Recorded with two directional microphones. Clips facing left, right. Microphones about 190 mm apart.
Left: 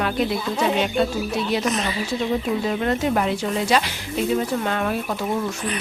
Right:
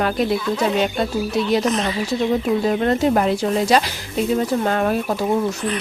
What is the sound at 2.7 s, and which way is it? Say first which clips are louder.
Speech: right 5 dB; 40° right (ahead or behind).